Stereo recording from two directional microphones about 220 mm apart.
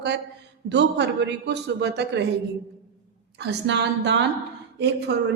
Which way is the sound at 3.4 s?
50° right (ahead or behind).